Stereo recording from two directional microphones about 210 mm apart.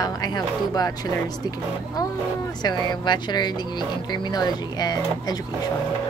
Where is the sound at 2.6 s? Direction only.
20° left (ahead or behind).